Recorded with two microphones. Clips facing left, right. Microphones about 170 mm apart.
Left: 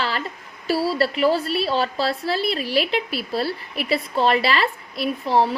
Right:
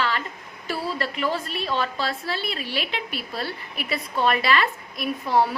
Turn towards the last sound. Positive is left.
turn(degrees=30)  # may be behind; listen again after turning